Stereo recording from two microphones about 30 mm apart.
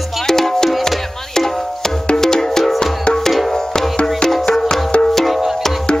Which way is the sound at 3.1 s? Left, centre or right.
Left.